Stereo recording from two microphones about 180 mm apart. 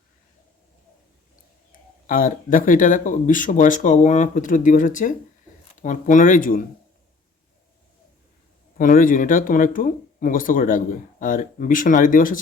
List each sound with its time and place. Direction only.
2.0 s speech: 50° left (ahead or behind)
8.8 s speech: 50° left (ahead or behind)